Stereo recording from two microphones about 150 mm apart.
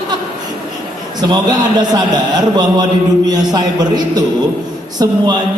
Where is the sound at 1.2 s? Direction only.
25° right (ahead or behind).